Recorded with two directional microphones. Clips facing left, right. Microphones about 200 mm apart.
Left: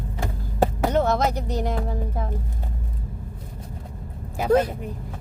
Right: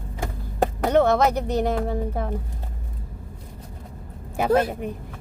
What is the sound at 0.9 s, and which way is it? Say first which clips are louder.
Speech: right 3 dB; 65° right (ahead or behind).